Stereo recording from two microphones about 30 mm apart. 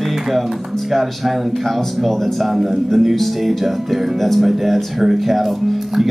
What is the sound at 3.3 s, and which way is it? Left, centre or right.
Speech, centre.